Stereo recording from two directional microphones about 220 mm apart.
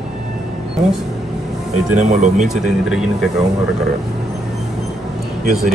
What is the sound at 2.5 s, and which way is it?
Speech, centre (ahead or behind).